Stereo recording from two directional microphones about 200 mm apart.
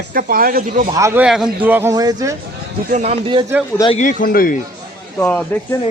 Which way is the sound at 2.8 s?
35° right (ahead or behind).